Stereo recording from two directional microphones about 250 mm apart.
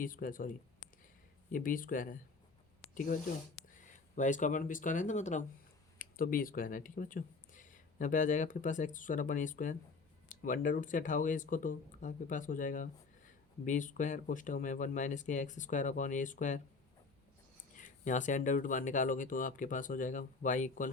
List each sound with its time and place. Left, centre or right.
0.0 s speech: left
1.5 s speech: left
3.8 s speech: left
17.7 s speech: left